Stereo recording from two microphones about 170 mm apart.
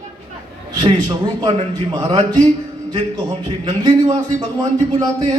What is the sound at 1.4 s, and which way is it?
A man's voice, 25° right (ahead or behind).